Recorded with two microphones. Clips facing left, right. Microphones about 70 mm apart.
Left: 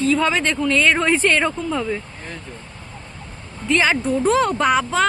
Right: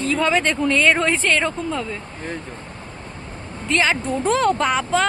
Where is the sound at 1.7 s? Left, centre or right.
Centre.